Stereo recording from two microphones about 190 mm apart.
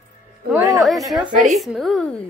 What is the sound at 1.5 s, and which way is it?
Speech, centre (ahead or behind).